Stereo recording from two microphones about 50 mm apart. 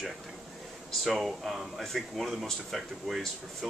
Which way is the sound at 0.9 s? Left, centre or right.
Centre.